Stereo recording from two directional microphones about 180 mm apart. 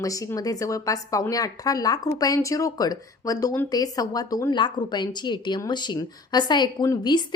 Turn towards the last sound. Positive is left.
turn(degrees=25)  # may be behind; listen again after turning